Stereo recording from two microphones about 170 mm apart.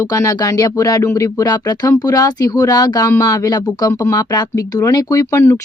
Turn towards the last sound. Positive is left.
turn(degrees=15)  # may be behind; listen again after turning